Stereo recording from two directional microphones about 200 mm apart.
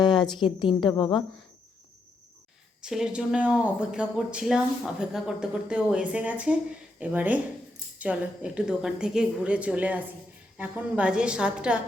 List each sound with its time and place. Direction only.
0.2 s a woman's voice: 25° left (ahead or behind)
2.8 s speech: 5° right (ahead or behind)